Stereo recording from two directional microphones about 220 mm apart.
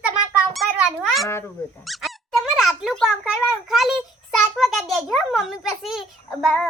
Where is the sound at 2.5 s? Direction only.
Centre (ahead or behind).